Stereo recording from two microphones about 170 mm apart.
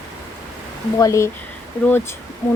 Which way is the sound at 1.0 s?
20° left (ahead or behind).